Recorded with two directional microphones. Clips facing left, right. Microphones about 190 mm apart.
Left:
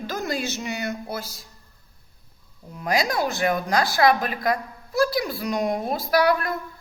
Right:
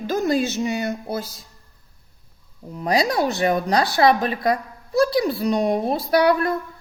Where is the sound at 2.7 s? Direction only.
30° right (ahead or behind).